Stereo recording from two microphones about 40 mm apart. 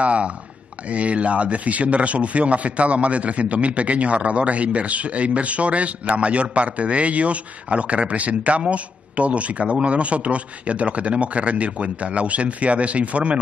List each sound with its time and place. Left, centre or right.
0.0 s a man's voice: right